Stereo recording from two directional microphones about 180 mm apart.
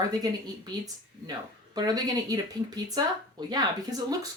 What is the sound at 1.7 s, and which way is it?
Speech, 20° right (ahead or behind).